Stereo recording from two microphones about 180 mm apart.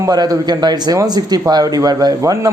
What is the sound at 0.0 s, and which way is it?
A man's voice, 20° right (ahead or behind).